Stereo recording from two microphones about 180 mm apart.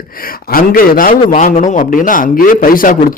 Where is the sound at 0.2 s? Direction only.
55° left (ahead or behind).